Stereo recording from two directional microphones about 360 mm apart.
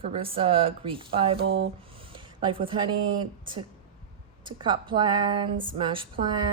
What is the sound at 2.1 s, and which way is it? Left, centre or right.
Speech, centre.